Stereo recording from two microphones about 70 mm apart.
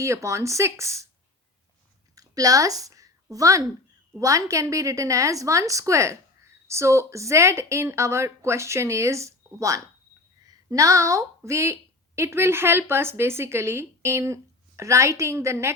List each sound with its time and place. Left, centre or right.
0.0 s speech: right
2.1 s a sound: right
4.2 s a woman's voice: right